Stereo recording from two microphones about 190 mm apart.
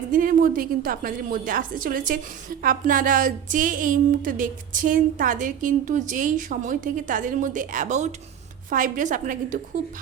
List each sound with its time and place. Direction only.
0.1 s a woman's voice: 45° right (ahead or behind)